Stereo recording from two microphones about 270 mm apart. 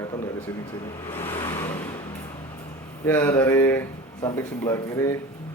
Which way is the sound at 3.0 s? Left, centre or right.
Centre.